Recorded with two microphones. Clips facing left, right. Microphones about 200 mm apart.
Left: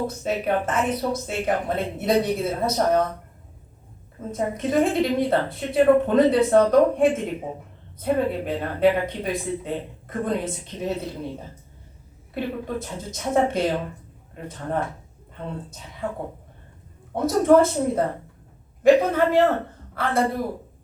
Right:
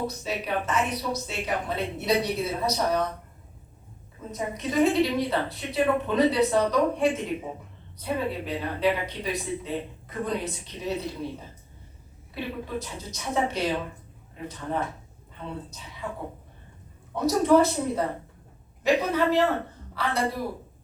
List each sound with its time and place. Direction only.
0.2 s a woman's voice: 50° left (ahead or behind)
4.3 s a woman's voice: 50° left (ahead or behind)
12.3 s a woman's voice: 50° left (ahead or behind)